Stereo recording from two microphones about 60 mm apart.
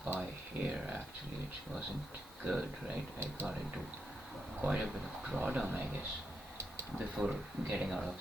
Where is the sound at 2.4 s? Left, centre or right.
Right.